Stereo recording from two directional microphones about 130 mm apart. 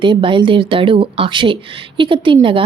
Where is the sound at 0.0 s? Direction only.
40° right (ahead or behind).